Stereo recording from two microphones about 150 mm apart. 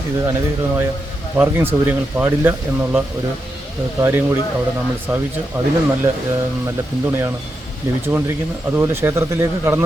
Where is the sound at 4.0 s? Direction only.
15° right (ahead or behind).